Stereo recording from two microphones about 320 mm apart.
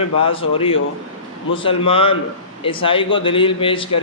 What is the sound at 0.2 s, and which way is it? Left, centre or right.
A man's voice, centre.